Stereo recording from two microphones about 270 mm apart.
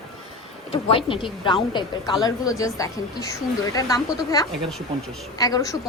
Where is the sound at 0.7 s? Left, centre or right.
Centre.